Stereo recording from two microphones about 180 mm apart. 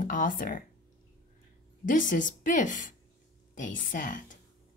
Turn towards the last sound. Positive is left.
turn(degrees=45)  # may be behind; listen again after turning